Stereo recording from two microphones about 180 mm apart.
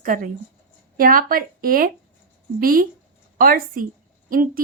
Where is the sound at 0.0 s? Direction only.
50° right (ahead or behind).